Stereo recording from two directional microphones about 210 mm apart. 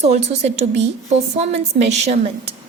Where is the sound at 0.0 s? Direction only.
30° right (ahead or behind).